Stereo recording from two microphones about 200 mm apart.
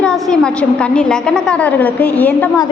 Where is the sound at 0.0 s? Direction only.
5° left (ahead or behind).